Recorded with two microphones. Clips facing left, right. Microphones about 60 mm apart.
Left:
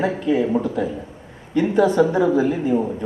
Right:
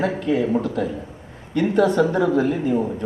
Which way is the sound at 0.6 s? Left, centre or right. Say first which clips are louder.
Left 1 dB; left.